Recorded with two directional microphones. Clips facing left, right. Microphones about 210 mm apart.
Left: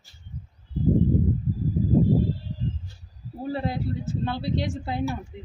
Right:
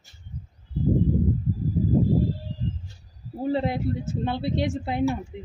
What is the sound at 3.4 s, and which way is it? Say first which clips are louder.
A woman's voice: right 4 dB; 20° right (ahead or behind).